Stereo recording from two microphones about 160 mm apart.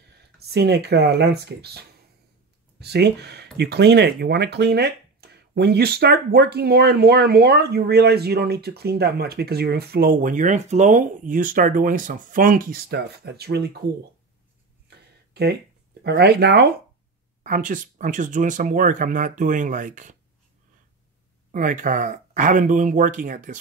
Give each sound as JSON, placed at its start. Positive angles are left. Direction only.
{"t": 0.5, "sound": "speech", "side_deg": -90}
{"t": 16.0, "sound": "speech", "side_deg": -90}
{"t": 17.4, "sound": "speech", "side_deg": -60}
{"t": 21.5, "sound": "speech", "side_deg": -55}